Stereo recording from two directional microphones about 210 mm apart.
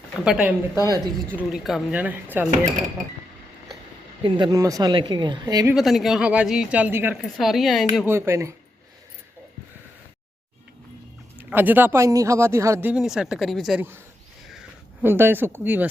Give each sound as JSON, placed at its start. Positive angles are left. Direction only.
{"t": 0.3, "sound": "speech", "side_deg": -5}
{"t": 0.9, "sound": "a woman's voice", "side_deg": -20}
{"t": 1.4, "sound": "speech", "side_deg": 0}
{"t": 4.2, "sound": "a woman's voice", "side_deg": -25}
{"t": 5.7, "sound": "speech", "side_deg": 0}
{"t": 7.2, "sound": "speech", "side_deg": 0}
{"t": 8.0, "sound": "speech", "side_deg": -10}
{"t": 11.4, "sound": "speech", "side_deg": -10}
{"t": 15.0, "sound": "speech", "side_deg": -10}